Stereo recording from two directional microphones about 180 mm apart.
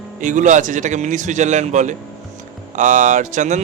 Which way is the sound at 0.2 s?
45° right (ahead or behind).